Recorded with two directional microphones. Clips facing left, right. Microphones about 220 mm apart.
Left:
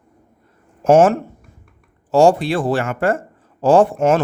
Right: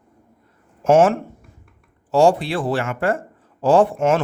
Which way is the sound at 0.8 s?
40° left (ahead or behind).